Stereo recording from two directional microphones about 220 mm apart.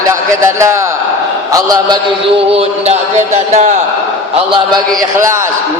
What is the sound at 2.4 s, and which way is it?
A man's voice, 25° right (ahead or behind).